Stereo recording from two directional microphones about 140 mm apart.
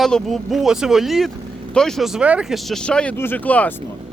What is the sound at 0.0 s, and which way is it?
Speech, centre (ahead or behind).